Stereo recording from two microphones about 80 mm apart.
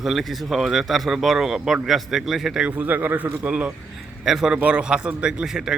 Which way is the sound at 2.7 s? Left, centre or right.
Right.